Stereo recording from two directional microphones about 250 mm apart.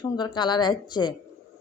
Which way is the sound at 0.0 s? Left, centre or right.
Centre.